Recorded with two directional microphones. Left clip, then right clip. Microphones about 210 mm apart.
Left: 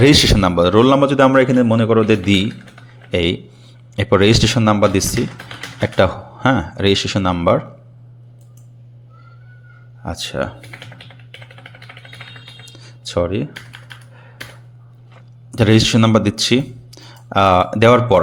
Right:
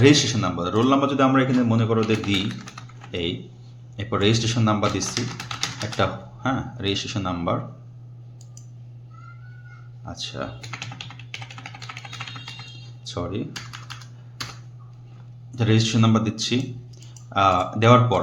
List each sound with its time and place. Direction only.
0.0 s a man's voice: 45° left (ahead or behind)
10.0 s a man's voice: 40° left (ahead or behind)
10.7 s typing: 40° right (ahead or behind)
12.0 s music: 40° right (ahead or behind)
13.1 s speech: 40° left (ahead or behind)
15.5 s speech: 45° left (ahead or behind)